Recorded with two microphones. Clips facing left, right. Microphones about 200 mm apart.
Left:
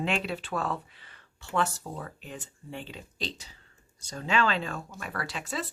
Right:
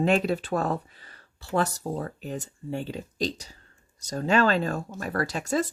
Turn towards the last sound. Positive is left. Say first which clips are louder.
# right 8 dB
turn(degrees=-45)  # may be behind; listen again after turning